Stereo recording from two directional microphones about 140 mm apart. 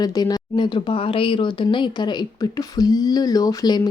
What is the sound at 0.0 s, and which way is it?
A woman's voice, 30° left (ahead or behind).